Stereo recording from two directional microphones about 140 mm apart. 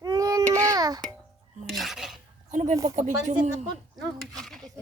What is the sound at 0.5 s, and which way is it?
Music, 25° right (ahead or behind).